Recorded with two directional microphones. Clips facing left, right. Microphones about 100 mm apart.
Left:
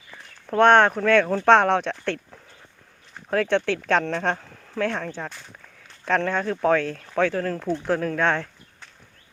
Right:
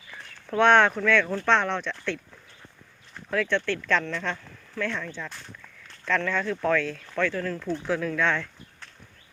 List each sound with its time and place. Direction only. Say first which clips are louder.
0.5 s speech: left 3 dB; 45° left (ahead or behind)
1.0 s speech: left 5 dB; 50° left (ahead or behind)
1.5 s speech: left 7 dB; 65° left (ahead or behind)
3.2 s speech: left 4 dB; 55° left (ahead or behind)
7.2 s speech: left 5 dB; 60° left (ahead or behind)
7.9 s speech: left 3 dB; 45° left (ahead or behind)